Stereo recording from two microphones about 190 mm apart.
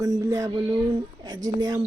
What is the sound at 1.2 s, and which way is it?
Speech, 20° right (ahead or behind).